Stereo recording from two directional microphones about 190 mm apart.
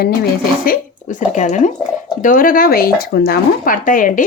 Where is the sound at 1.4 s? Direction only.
40° left (ahead or behind).